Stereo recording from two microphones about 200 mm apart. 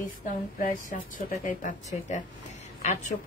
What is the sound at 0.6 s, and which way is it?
A woman's voice, 40° left (ahead or behind).